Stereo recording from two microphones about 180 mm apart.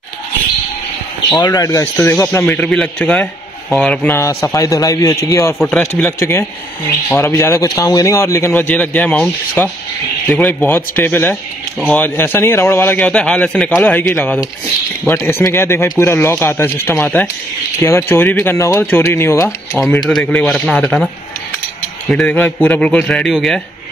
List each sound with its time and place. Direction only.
1.4 s a man's voice: 20° left (ahead or behind)
20.0 s speech: centre (ahead or behind)
22.1 s speech: 10° left (ahead or behind)